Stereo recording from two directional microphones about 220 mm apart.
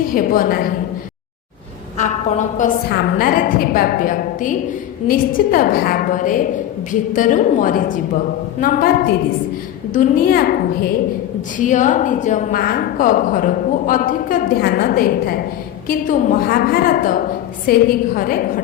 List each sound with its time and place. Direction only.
0.1 s a woman's voice: 40° left (ahead or behind)
2.0 s a woman's voice: 30° left (ahead or behind)